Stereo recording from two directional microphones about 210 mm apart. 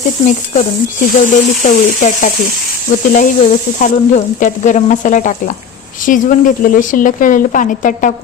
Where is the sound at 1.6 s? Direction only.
35° left (ahead or behind).